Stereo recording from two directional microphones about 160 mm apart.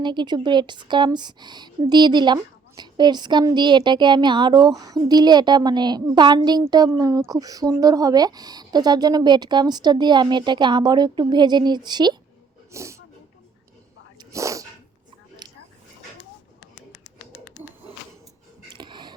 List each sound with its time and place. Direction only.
0.0 s a woman's voice: 30° right (ahead or behind)
14.2 s sneeze: 20° right (ahead or behind)
18.8 s a sound: 30° right (ahead or behind)